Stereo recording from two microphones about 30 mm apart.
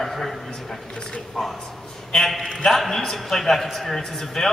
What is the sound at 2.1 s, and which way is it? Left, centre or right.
A man's voice, centre.